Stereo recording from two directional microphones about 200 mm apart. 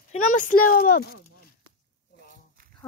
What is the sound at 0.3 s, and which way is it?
Speech, 40° left (ahead or behind).